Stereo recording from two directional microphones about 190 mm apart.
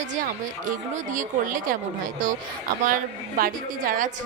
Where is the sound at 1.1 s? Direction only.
45° right (ahead or behind).